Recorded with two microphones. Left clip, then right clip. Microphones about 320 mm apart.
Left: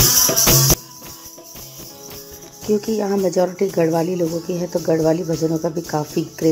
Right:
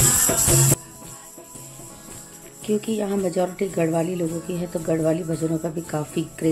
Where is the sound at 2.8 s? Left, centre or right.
Centre.